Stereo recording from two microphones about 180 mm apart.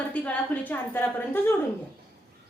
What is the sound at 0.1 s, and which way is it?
A woman's voice, 10° left (ahead or behind).